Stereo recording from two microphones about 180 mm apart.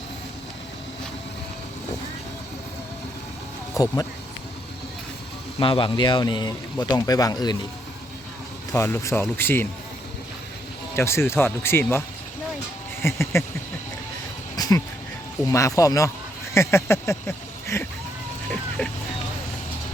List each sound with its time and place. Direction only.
3.8 s a man's voice: 20° left (ahead or behind)
5.5 s a man's voice: 30° left (ahead or behind)
8.7 s speech: 15° left (ahead or behind)
10.9 s speech: 15° left (ahead or behind)
14.5 s a sound: 20° left (ahead or behind)
15.4 s speech: 20° left (ahead or behind)